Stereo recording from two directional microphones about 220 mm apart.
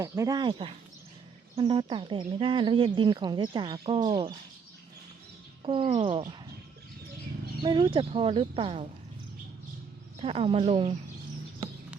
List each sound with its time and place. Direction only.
0.0 s speech: 15° right (ahead or behind)
5.6 s speech: 25° right (ahead or behind)
7.6 s speech: 20° right (ahead or behind)
10.2 s speech: 25° right (ahead or behind)